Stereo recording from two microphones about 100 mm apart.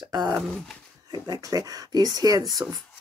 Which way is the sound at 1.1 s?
35° right (ahead or behind).